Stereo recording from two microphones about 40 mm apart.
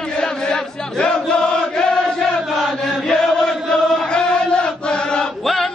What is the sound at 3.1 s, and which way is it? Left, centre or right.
Chant, centre.